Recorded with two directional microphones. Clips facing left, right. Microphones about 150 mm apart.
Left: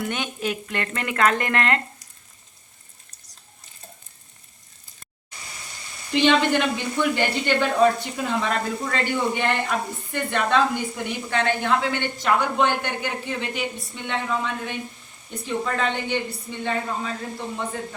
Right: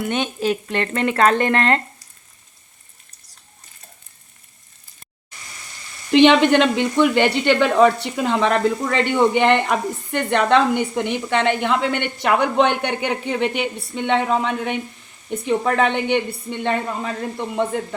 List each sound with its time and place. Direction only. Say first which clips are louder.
0.0 s speech: right 6 dB; 25° right (ahead or behind)
6.1 s speech: right 7 dB; 70° right (ahead or behind)
11.6 s speech: right 3 dB; 65° right (ahead or behind)